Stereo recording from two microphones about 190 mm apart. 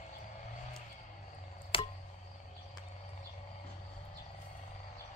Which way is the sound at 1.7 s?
30° left (ahead or behind).